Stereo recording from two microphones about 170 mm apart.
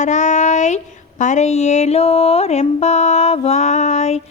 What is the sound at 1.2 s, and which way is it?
Music, 45° left (ahead or behind).